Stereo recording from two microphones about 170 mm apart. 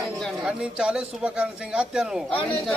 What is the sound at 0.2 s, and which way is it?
Speech, 5° right (ahead or behind).